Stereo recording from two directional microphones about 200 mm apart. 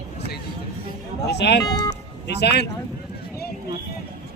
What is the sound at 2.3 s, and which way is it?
Speech, 55° left (ahead or behind).